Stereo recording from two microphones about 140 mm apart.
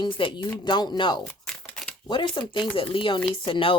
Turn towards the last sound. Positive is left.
turn(degrees=35)  # may be behind; listen again after turning